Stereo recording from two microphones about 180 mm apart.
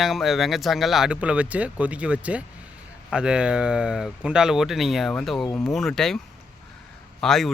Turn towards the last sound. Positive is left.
turn(degrees=0)  # may be behind; listen again after turning